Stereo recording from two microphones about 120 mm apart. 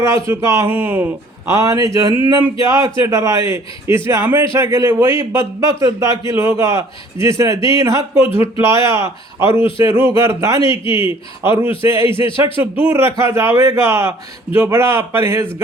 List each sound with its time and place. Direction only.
0.3 s a man's voice: 25° right (ahead or behind)
1.5 s a man's voice: 25° right (ahead or behind)